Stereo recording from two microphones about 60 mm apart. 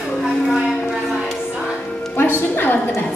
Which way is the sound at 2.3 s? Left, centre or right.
Left.